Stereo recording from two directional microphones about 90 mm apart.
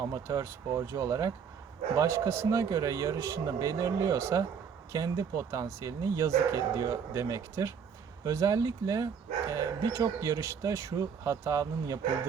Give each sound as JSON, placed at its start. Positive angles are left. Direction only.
{"t": 0.3, "sound": "speech", "side_deg": -35}